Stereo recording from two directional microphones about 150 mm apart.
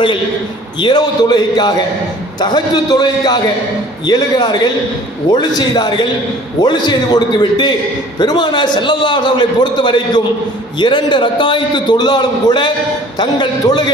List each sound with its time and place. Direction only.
0.7 s a man's voice: 30° left (ahead or behind)